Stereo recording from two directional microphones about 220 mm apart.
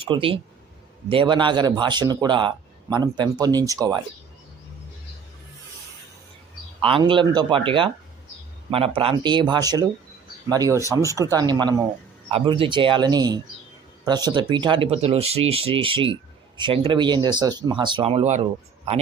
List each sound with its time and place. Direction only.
0.0 s speech: 25° right (ahead or behind)
6.8 s speech: 25° right (ahead or behind)